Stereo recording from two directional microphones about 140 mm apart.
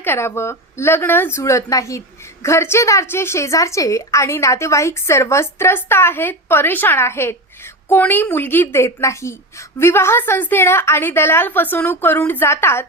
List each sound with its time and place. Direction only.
0.0 s a woman's voice: 15° left (ahead or behind)